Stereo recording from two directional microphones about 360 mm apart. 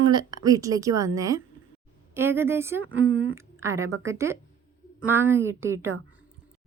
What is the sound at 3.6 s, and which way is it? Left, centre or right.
Speech, centre.